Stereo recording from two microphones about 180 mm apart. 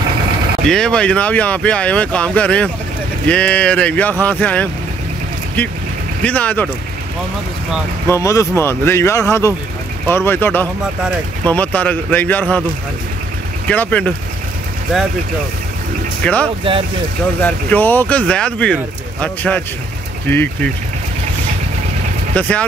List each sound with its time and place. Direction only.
0.7 s speech: 5° left (ahead or behind)
6.2 s speech: 10° left (ahead or behind)
8.1 s speech: 15° left (ahead or behind)
13.7 s speech: 10° left (ahead or behind)
16.2 s speech: 5° left (ahead or behind)
22.3 s speech: 5° left (ahead or behind)